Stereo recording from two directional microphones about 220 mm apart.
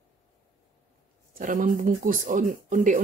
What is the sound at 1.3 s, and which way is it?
Speech, 40° right (ahead or behind).